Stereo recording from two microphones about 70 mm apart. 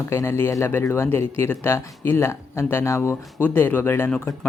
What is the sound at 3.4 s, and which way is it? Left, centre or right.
Speech, left.